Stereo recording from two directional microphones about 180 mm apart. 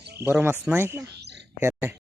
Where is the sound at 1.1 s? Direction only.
70° right (ahead or behind).